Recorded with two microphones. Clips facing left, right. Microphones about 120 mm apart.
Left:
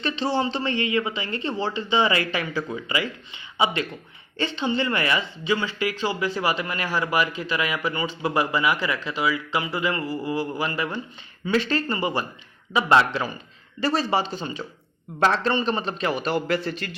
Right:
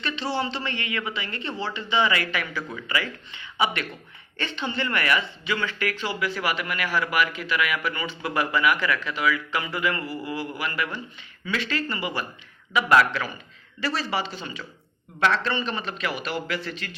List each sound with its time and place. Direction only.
0.4 s a man's voice: 35° left (ahead or behind)
6.1 s a man's voice: 30° left (ahead or behind)